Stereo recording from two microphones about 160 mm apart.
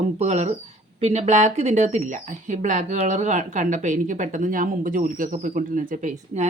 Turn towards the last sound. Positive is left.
turn(degrees=-50)  # may be behind; listen again after turning